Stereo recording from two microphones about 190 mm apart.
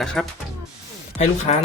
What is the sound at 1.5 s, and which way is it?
Speech, 35° left (ahead or behind).